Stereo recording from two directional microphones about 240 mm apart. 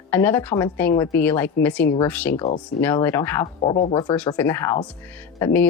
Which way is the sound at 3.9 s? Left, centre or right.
Centre.